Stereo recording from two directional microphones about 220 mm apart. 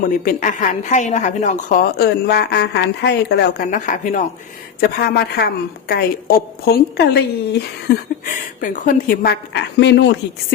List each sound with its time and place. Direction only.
0.0 s a woman's voice: 40° left (ahead or behind)
7.9 s speech: 35° left (ahead or behind); by 10.1 s 55° left (ahead or behind)